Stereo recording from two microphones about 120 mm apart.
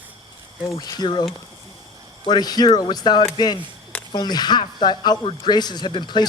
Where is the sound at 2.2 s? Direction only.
35° left (ahead or behind).